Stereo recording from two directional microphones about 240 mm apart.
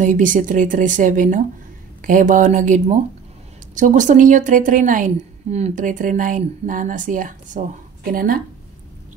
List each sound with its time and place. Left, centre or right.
0.0 s a woman's voice: right